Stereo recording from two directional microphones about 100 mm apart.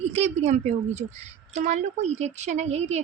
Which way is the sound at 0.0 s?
90° right.